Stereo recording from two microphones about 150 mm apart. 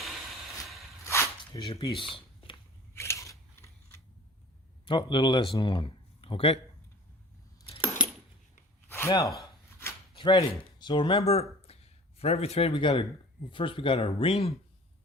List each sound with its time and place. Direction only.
1.0 s a sound: 15° left (ahead or behind)
1.5 s speech: 30° left (ahead or behind)
2.9 s scissors: 20° left (ahead or behind)
4.9 s a man's voice: 30° left (ahead or behind)
8.0 s keys jangling: 10° right (ahead or behind)
8.9 s a sound: 15° left (ahead or behind)
10.2 s speech: 35° left (ahead or behind)
11.2 s speech: 45° left (ahead or behind)
11.6 s a sound: 40° left (ahead or behind)
13.5 s speech: 35° left (ahead or behind)